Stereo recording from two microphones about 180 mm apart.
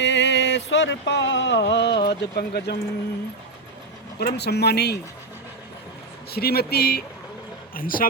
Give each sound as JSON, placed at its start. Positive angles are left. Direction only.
{"t": 0.0, "sound": "a sound", "side_deg": 80}
{"t": 2.0, "sound": "speech", "side_deg": 60}
{"t": 4.2, "sound": "speech", "side_deg": 65}
{"t": 6.3, "sound": "speech", "side_deg": 60}